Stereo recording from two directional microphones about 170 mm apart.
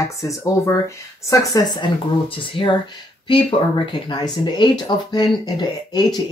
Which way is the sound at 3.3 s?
30° left (ahead or behind).